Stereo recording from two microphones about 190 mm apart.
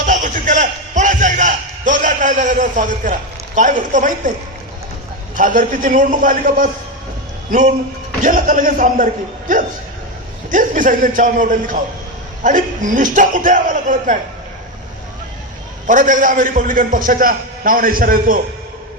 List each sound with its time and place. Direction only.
0.0 s a sound: 40° right (ahead or behind)
5.4 s a man's voice: 45° right (ahead or behind)
8.2 s a man's voice: 45° right (ahead or behind)
10.5 s a man's voice: 45° right (ahead or behind)
15.9 s a man's voice: 45° right (ahead or behind)